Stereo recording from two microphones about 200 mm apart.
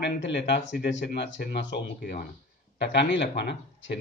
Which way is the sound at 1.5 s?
50° left (ahead or behind).